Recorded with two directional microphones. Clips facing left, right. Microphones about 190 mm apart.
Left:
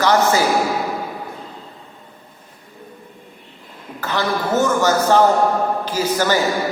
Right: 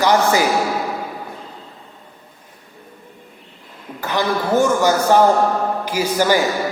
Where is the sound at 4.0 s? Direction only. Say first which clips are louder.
Right 1 dB; 15° right (ahead or behind).